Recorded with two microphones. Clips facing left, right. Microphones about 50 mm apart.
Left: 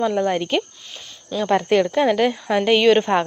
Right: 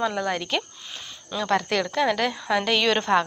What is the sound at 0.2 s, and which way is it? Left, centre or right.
A woman's voice, centre.